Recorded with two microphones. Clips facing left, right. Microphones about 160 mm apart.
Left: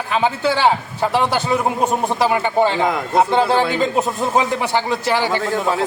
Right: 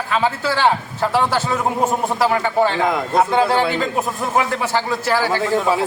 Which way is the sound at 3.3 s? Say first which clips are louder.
Even; centre (ahead or behind).